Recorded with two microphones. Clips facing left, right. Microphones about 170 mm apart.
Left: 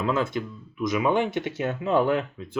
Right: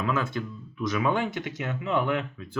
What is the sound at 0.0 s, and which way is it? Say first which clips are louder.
Speech: left 3 dB; 20° left (ahead or behind).